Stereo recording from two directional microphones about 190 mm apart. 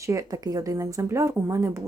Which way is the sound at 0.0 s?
15° right (ahead or behind).